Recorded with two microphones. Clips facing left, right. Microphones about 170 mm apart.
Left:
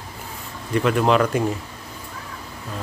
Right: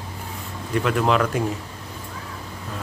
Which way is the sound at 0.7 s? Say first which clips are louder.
Left 2 dB; centre (ahead or behind).